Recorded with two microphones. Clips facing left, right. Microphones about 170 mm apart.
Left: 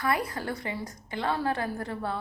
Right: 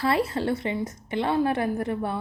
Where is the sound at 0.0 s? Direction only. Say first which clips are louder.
Right 5 dB; 25° right (ahead or behind).